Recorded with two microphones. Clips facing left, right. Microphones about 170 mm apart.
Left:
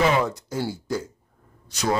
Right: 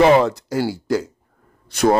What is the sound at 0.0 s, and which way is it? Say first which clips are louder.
Speech: right 8 dB; 80° right.